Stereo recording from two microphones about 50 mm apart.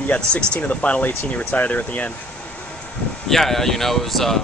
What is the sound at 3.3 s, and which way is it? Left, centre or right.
Speech, centre.